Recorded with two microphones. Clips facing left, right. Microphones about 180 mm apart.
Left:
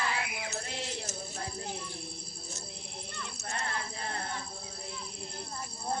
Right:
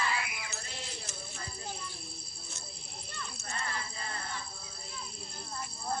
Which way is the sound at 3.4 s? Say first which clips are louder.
Left 3 dB; 60° left (ahead or behind).